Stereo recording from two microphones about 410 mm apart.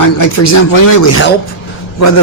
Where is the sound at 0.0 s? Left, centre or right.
Left.